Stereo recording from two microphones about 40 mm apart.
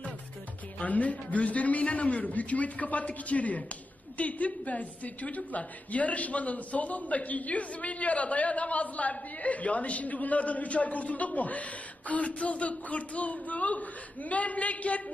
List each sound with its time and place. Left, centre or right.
0.7 s a woman's voice: left